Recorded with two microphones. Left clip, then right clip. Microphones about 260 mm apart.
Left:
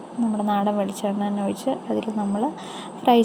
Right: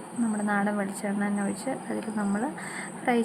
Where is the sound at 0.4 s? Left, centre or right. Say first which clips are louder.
Left 6 dB; centre.